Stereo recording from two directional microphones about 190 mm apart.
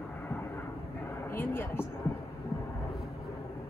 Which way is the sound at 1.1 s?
15° left (ahead or behind).